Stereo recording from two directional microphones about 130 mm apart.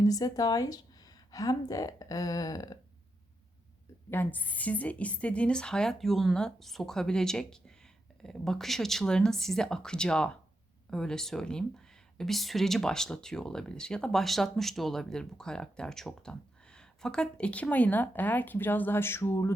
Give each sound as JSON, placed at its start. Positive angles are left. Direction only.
{"t": 0.0, "sound": "speech", "side_deg": 30}
{"t": 4.1, "sound": "speech", "side_deg": 15}